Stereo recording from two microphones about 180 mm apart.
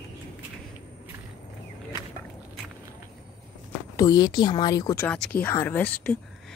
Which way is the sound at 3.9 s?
20° left (ahead or behind).